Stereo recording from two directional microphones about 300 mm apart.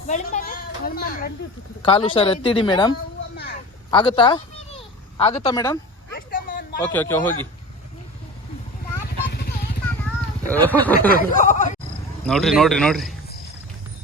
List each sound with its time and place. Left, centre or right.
0.1 s a sound: left
1.8 s speech: centre
3.9 s speech: centre
6.1 s a sound: left
6.9 s speech: centre
9.3 s vehicle: left
10.2 s speech: centre
11.1 s chuckle: left
12.2 s speech: centre